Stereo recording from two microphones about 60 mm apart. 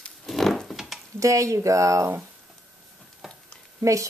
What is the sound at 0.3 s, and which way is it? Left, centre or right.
Wood, centre.